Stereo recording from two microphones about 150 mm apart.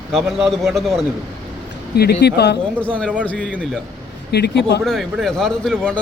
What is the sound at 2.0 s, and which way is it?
Speech, 90° left.